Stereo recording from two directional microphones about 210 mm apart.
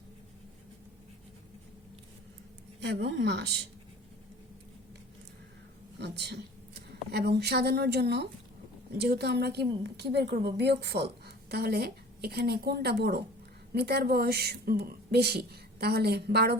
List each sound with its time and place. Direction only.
2.8 s a woman's voice: 60° right (ahead or behind)
6.0 s a sound: 50° right (ahead or behind)
6.9 s a woman's voice: 50° right (ahead or behind)